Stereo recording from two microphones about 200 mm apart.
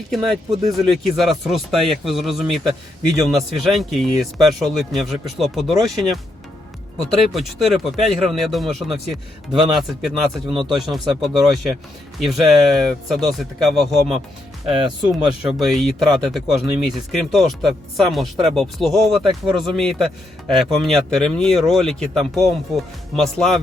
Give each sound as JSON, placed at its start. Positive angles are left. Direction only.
{"t": 0.3, "sound": "speech", "side_deg": 0}
{"t": 7.3, "sound": "speech", "side_deg": 0}
{"t": 10.4, "sound": "speech", "side_deg": -25}
{"t": 10.9, "sound": "speech", "side_deg": 0}